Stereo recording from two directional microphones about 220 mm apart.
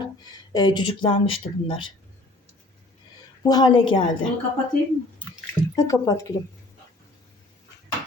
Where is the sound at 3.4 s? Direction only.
20° left (ahead or behind).